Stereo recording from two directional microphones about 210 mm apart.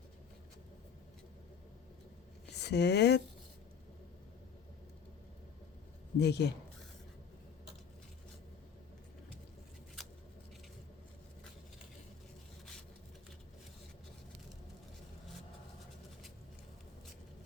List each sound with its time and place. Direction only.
2.5 s speech: 55° left (ahead or behind)
6.1 s speech: 50° left (ahead or behind)
10.0 s scissors: centre (ahead or behind)